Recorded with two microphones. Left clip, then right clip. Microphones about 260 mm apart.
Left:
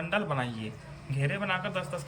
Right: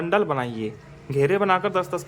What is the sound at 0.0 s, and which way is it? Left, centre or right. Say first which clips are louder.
Speech: right 8 dB; centre.